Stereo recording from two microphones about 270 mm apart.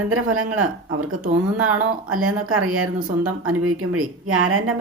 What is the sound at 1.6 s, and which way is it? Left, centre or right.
Speech, centre.